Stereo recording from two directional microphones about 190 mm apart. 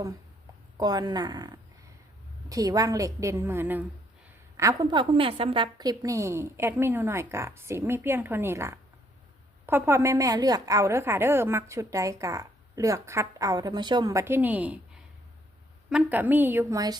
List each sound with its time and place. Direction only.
0.8 s a woman's voice: 20° right (ahead or behind)